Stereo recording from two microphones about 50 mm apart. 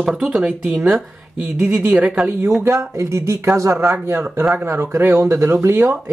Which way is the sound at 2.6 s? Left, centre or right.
Right.